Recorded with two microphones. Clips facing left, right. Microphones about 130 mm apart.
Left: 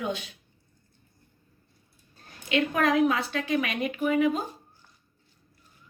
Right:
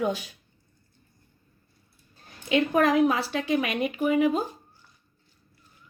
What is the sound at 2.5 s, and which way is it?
Speech, 30° right (ahead or behind).